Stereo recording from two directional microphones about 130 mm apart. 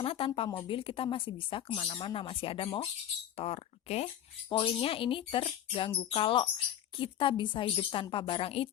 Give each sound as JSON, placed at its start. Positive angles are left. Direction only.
{"t": 0.0, "sound": "a sound", "side_deg": 45}
{"t": 0.3, "sound": "speech", "side_deg": 40}
{"t": 4.4, "sound": "speech", "side_deg": 40}